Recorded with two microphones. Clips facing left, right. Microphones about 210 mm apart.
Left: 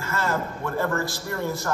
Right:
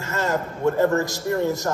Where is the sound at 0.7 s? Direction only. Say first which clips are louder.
Right 8 dB; 20° right (ahead or behind).